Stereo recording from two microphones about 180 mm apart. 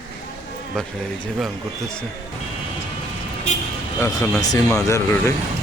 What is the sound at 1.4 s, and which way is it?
Speech, 5° left (ahead or behind).